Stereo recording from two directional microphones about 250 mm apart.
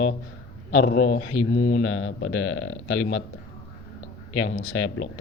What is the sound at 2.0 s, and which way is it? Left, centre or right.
Speech, left.